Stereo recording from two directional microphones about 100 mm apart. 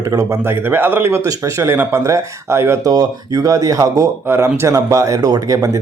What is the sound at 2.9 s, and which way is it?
Speech, 40° right (ahead or behind).